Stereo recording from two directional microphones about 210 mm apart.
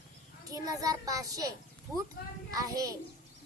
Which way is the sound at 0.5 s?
15° right (ahead or behind).